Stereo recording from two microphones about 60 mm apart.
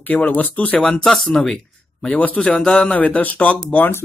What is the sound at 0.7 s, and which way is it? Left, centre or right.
Speech, centre.